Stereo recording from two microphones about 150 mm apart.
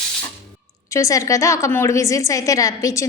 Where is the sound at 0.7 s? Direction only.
20° left (ahead or behind).